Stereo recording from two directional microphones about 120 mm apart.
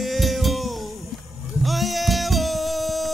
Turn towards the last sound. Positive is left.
turn(degrees=0)  # may be behind; listen again after turning